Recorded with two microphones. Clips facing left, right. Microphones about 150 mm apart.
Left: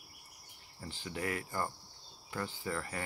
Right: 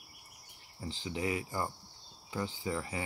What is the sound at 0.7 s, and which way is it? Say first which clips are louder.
Speech: right 3 dB; 15° right (ahead or behind).